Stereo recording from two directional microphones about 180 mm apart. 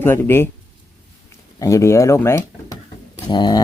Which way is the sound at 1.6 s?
15° left (ahead or behind).